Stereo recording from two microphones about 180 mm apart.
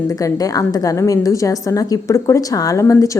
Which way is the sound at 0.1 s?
20° left (ahead or behind).